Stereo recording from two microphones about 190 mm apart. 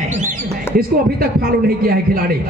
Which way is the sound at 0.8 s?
50° right (ahead or behind).